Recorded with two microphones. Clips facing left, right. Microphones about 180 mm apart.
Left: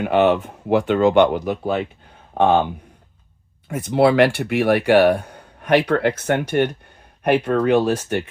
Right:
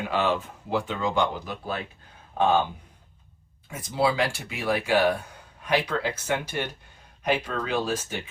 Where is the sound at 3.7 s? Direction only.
65° left (ahead or behind).